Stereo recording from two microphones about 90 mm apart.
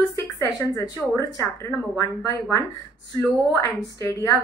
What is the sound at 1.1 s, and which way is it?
A woman's voice, 35° left (ahead or behind).